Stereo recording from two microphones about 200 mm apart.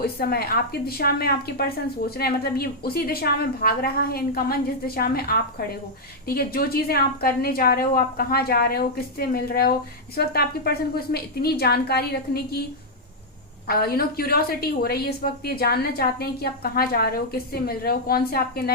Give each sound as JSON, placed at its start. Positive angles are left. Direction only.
{"t": 0.0, "sound": "a woman's voice", "side_deg": 50}
{"t": 13.7, "sound": "a woman's voice", "side_deg": 50}